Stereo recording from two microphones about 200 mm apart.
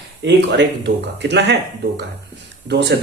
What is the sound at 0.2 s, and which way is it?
Speech, 60° right (ahead or behind).